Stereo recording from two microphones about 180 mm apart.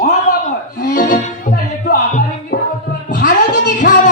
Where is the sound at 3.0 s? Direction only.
45° left (ahead or behind).